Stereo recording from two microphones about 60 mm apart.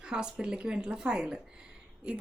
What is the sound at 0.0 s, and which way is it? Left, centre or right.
A woman's voice, centre.